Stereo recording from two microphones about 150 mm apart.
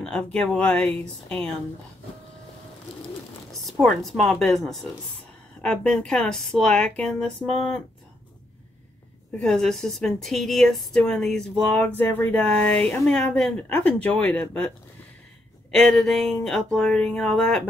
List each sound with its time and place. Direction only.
0.0 s a woman's voice: 5° left (ahead or behind)
3.6 s a woman's voice: centre (ahead or behind)
9.4 s a woman's voice: 5° left (ahead or behind)
15.7 s a woman's voice: 5° left (ahead or behind)